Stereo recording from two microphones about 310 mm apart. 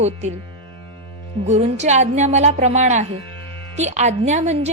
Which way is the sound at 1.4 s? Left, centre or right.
Right.